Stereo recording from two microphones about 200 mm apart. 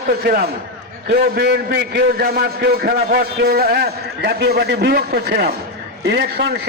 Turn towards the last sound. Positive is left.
turn(degrees=-55)  # may be behind; listen again after turning